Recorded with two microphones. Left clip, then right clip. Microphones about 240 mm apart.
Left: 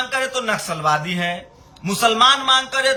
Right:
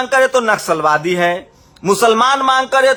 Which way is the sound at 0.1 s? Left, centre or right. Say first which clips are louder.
Right 9 dB; centre.